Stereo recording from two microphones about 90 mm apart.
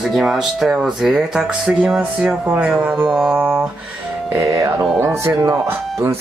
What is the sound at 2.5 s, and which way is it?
Speech, 10° right (ahead or behind).